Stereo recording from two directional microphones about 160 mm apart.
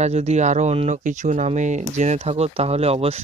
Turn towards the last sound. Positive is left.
turn(degrees=-40)  # may be behind; listen again after turning